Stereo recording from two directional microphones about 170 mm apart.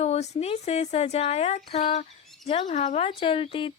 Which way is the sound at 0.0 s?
40° left (ahead or behind).